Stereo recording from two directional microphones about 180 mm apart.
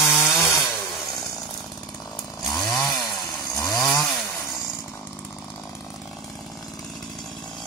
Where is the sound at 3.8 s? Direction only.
5° left (ahead or behind).